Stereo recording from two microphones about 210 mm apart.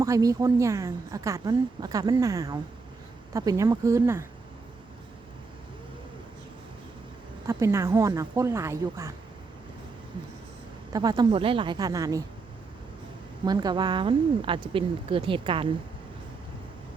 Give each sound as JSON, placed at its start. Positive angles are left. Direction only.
{"t": 0.0, "sound": "a woman's voice", "side_deg": -15}
{"t": 7.4, "sound": "a woman's voice", "side_deg": -15}
{"t": 10.9, "sound": "speech", "side_deg": -20}
{"t": 13.4, "sound": "speech", "side_deg": -20}